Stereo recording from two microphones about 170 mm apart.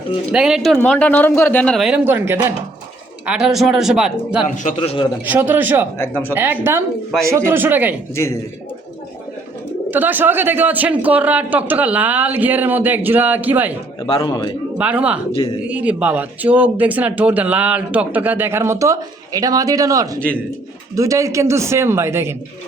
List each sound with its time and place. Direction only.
0.3 s speech: 5° right (ahead or behind)
3.2 s speech: 5° right (ahead or behind)
4.4 s a man's voice: 50° left (ahead or behind)
4.8 s a man's voice: 30° left (ahead or behind)
5.2 s speech: 10° right (ahead or behind)
6.0 s speech: 10° left (ahead or behind)
6.3 s speech: 10° right (ahead or behind)
9.9 s speech: 10° right (ahead or behind)
14.1 s a man's voice: 25° left (ahead or behind)
14.8 s speech: 5° right (ahead or behind)
20.1 s speech: 10° left (ahead or behind)
20.9 s speech: 20° right (ahead or behind)